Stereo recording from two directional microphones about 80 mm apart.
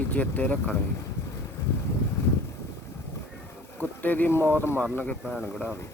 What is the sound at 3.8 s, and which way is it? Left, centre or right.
Speech, left.